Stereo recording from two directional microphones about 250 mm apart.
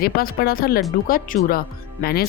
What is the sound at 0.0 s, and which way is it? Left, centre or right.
Speech, left.